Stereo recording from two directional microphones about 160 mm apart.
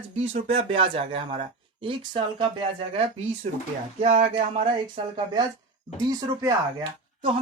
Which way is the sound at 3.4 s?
45° right (ahead or behind).